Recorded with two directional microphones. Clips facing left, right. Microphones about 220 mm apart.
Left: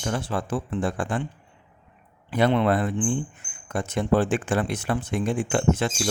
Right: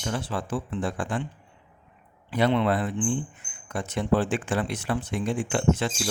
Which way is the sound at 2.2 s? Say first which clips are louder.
Left 2 dB; 50° left (ahead or behind).